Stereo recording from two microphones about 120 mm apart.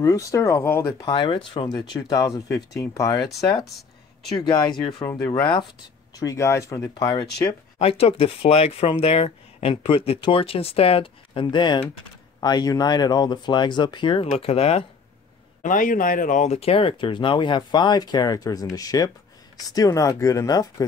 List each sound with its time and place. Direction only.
0.0 s speech: 30° left (ahead or behind)
1.0 s speech: 45° left (ahead or behind)
1.7 s speech: 30° left (ahead or behind)
5.4 s speech: 40° left (ahead or behind)
6.1 s speech: 25° left (ahead or behind)
7.1 s speech: 40° left (ahead or behind)
7.8 s speech: 55° left (ahead or behind)
15.6 s speech: 90° left; by 20.8 s 30° left (ahead or behind)